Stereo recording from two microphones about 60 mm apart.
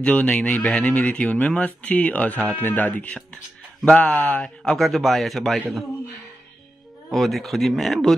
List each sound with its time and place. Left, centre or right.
0.0 s speech: left
4.6 s speech: centre
7.1 s speech: centre